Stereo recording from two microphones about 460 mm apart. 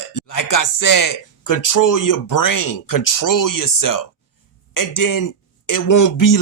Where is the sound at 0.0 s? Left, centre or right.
Left.